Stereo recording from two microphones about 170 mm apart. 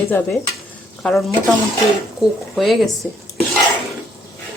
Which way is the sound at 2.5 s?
Centre (ahead or behind).